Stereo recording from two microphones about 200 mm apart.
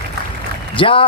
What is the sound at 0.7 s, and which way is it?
Speech, 25° left (ahead or behind).